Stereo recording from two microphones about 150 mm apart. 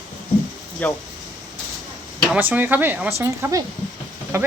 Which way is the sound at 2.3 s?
15° right (ahead or behind).